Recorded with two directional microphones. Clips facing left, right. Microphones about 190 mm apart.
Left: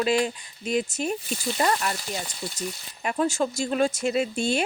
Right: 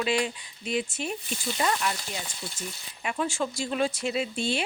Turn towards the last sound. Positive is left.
turn(degrees=45)  # may be behind; listen again after turning